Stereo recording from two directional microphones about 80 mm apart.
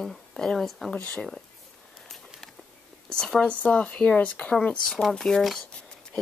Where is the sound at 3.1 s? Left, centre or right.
Centre.